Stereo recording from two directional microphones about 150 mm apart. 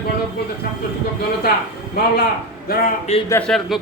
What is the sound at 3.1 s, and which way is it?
Speech, 45° left (ahead or behind).